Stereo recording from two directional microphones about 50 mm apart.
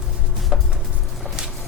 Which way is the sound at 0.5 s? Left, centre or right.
Centre.